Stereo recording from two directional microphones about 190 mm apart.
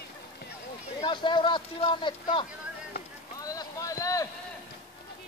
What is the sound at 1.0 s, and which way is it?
Speech, 25° left (ahead or behind).